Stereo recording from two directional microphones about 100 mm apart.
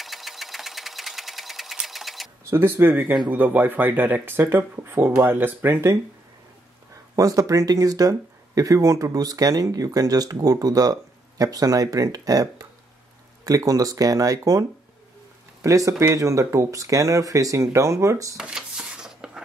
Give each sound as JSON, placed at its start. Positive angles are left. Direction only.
{"t": 0.0, "sound": "sewing machine", "side_deg": 0}
{"t": 2.5, "sound": "speech", "side_deg": -20}
{"t": 7.2, "sound": "speech", "side_deg": -35}
{"t": 18.3, "sound": "a sound", "side_deg": -5}